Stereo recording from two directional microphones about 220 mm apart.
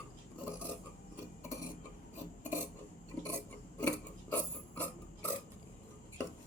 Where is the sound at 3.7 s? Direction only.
5° left (ahead or behind).